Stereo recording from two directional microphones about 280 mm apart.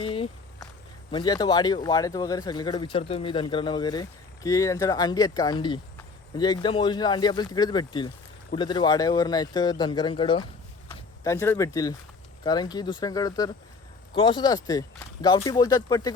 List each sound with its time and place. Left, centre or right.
0.0 s walk: centre
1.1 s speech: centre